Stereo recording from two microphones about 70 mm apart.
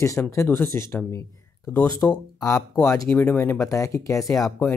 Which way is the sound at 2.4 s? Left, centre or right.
Left.